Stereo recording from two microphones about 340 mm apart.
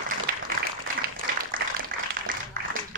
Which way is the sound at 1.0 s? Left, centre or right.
Right.